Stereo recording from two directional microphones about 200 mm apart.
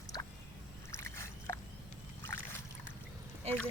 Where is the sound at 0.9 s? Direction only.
10° left (ahead or behind).